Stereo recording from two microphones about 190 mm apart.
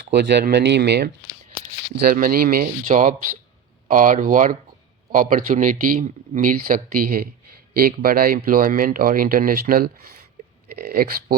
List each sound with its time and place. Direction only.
0.0 s speech: 60° right (ahead or behind)